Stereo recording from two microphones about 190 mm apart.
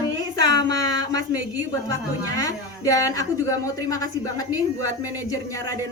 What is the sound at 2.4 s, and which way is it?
A woman's voice, 20° left (ahead or behind).